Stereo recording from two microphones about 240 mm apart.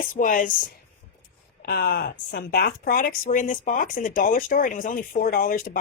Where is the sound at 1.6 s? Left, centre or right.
Left.